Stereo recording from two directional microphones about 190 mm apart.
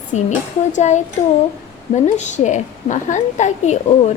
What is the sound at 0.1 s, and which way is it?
Speech, 35° left (ahead or behind).